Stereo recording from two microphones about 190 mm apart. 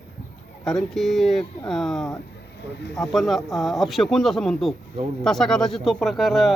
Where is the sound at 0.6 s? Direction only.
Centre (ahead or behind).